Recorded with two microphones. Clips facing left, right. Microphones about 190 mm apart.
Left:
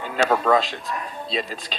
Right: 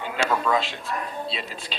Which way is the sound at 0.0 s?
40° left (ahead or behind).